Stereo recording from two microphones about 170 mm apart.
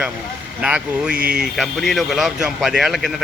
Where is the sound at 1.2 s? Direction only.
60° right (ahead or behind).